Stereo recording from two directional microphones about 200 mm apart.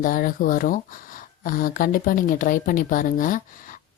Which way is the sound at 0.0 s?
45° left (ahead or behind).